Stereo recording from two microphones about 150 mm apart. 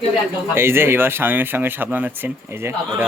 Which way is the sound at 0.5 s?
15° right (ahead or behind).